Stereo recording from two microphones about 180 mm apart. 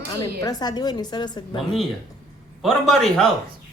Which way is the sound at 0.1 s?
20° left (ahead or behind).